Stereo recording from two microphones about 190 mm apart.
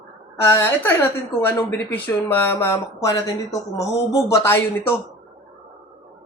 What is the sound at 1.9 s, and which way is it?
A woman's voice, 10° left (ahead or behind).